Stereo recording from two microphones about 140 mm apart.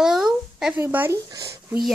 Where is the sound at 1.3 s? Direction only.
20° right (ahead or behind).